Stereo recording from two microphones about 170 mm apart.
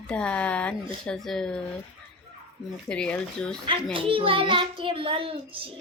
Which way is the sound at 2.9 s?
5° left (ahead or behind).